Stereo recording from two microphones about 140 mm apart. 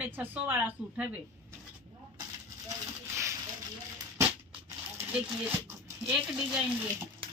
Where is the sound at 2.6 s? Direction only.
20° right (ahead or behind).